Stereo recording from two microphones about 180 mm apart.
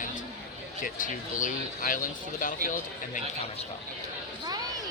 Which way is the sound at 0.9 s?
45° left (ahead or behind).